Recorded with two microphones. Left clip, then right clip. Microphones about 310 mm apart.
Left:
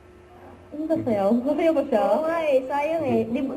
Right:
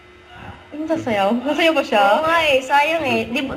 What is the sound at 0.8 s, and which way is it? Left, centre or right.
A woman's voice, centre.